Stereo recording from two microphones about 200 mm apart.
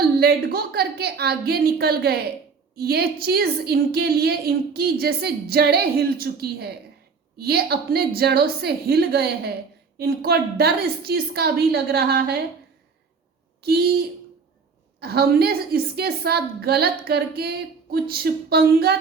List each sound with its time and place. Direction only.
0.0 s a woman's voice: 50° right (ahead or behind)
13.6 s a woman's voice: 50° right (ahead or behind)
15.0 s a woman's voice: 50° right (ahead or behind)